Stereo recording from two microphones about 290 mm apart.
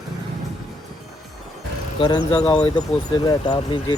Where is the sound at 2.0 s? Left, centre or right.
Centre.